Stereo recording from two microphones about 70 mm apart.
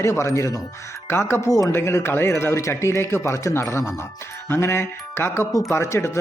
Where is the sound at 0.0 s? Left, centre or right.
Left.